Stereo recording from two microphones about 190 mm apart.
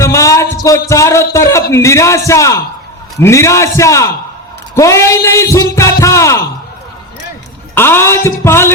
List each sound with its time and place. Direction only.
0.0 s music: 15° left (ahead or behind)
0.9 s a man's voice: 15° left (ahead or behind)
7.8 s a man's voice: 10° left (ahead or behind)